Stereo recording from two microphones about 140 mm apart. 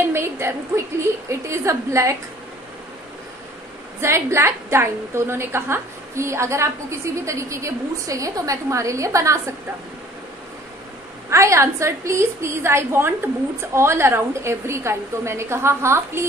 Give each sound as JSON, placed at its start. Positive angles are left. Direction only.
{"t": 0.1, "sound": "a sound", "side_deg": -20}
{"t": 1.5, "sound": "a woman's voice", "side_deg": -20}
{"t": 4.0, "sound": "a woman's voice", "side_deg": -20}
{"t": 11.2, "sound": "a woman's voice", "side_deg": -20}